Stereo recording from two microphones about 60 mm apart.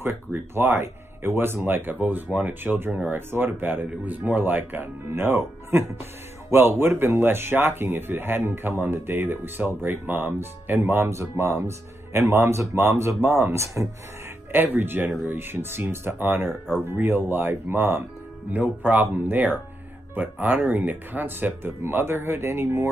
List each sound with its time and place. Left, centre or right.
0.3 s speech: right
2.2 s speech: right
2.6 s speech: right
11.1 s speech: right
14.5 s speech: right